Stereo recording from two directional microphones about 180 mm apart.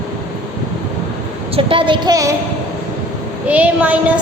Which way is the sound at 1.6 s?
30° right (ahead or behind).